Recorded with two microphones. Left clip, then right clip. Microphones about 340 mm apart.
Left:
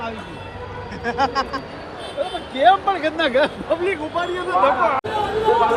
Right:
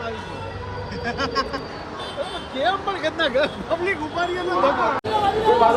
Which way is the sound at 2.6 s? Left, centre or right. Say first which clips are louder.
Left 7 dB; centre.